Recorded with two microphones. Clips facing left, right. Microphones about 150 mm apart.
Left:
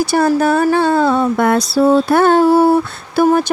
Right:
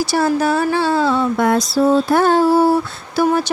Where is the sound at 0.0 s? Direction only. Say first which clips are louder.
Left 3 dB; 55° left (ahead or behind).